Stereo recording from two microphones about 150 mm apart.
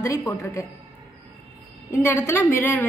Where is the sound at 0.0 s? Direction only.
20° left (ahead or behind).